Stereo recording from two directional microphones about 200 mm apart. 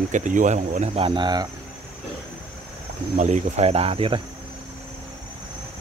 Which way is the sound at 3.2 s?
35° right (ahead or behind).